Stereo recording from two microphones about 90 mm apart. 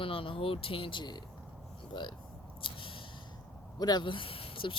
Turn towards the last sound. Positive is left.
turn(degrees=75)  # may be behind; listen again after turning